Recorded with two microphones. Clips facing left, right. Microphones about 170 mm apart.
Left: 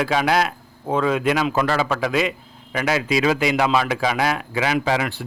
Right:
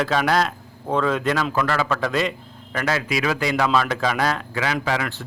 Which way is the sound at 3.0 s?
25° left (ahead or behind).